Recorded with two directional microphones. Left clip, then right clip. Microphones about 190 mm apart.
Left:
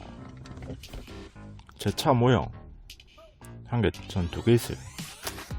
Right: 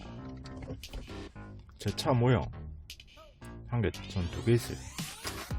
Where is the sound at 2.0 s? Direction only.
40° left (ahead or behind).